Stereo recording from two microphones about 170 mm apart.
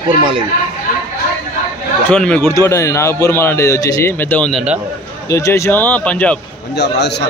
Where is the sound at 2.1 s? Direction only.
10° left (ahead or behind).